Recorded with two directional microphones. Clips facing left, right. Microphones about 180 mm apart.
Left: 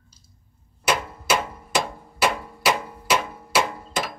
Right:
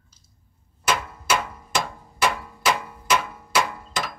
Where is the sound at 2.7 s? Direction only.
25° left (ahead or behind).